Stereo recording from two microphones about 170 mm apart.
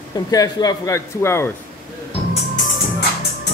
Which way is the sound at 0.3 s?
20° left (ahead or behind).